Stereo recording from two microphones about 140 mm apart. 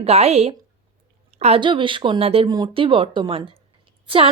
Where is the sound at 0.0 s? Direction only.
50° right (ahead or behind).